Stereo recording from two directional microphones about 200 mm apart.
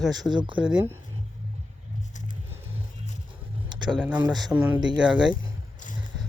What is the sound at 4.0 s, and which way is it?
Speech, 5° right (ahead or behind).